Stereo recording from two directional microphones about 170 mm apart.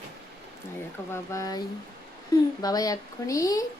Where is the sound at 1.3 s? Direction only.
20° left (ahead or behind).